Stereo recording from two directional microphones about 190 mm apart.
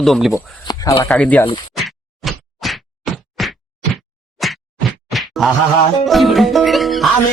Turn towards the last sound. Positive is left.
turn(degrees=0)  # may be behind; listen again after turning